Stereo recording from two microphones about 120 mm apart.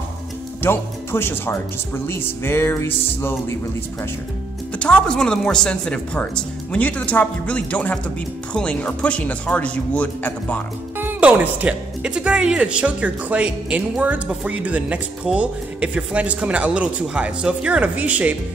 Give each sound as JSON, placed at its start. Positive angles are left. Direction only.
{"t": 0.6, "sound": "speech", "side_deg": 20}
{"t": 4.7, "sound": "speech", "side_deg": 10}
{"t": 11.0, "sound": "speech", "side_deg": -15}